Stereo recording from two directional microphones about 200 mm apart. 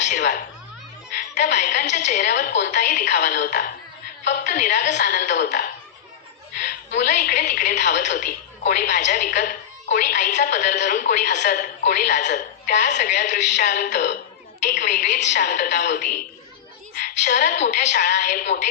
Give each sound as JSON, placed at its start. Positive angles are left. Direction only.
{"t": 0.0, "sound": "sneeze", "side_deg": 40}
{"t": 1.4, "sound": "a woman's voice", "side_deg": 40}
{"t": 2.2, "sound": "a woman's voice", "side_deg": 50}
{"t": 5.3, "sound": "a woman's voice", "side_deg": 50}
{"t": 7.0, "sound": "a woman's voice", "side_deg": 40}
{"t": 17.1, "sound": "a woman's voice", "side_deg": 40}